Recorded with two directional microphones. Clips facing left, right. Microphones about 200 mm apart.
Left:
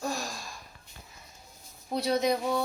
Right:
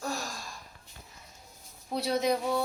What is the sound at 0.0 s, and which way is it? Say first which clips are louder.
Gasp: left 2 dB; 15° left (ahead or behind).